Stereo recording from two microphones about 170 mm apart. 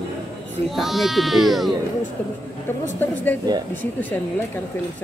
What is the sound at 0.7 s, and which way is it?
Speech, centre (ahead or behind).